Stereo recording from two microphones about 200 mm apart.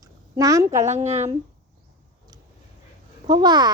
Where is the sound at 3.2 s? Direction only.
20° right (ahead or behind).